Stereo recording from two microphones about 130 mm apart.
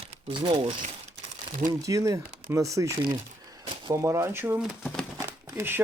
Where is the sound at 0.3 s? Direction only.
40° right (ahead or behind).